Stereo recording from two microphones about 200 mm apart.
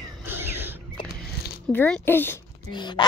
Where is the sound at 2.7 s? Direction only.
20° left (ahead or behind).